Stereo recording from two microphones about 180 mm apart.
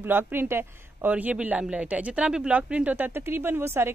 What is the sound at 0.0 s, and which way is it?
A man's voice, 10° right (ahead or behind).